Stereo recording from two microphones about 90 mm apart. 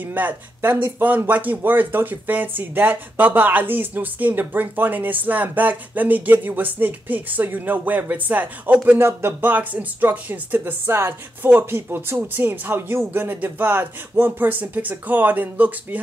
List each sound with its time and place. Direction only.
0.0 s speech: 20° right (ahead or behind)